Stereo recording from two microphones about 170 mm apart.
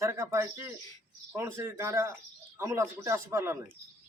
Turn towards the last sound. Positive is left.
turn(degrees=-15)  # may be behind; listen again after turning